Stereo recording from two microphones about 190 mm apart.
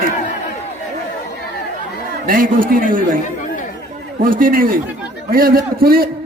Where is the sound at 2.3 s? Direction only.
45° right (ahead or behind).